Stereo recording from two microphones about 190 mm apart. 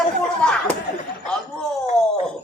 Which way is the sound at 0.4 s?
5° left (ahead or behind).